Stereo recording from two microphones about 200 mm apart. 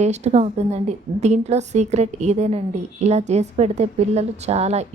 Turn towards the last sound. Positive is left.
turn(degrees=-35)  # may be behind; listen again after turning